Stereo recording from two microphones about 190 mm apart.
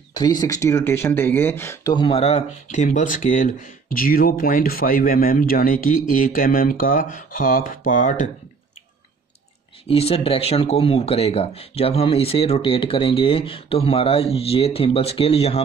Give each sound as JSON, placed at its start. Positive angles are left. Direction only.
{"t": 0.1, "sound": "speech", "side_deg": 20}
{"t": 9.8, "sound": "speech", "side_deg": 30}